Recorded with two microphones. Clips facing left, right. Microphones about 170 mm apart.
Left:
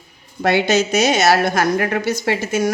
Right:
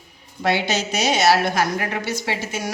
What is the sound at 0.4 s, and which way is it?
A woman's voice, 50° left (ahead or behind).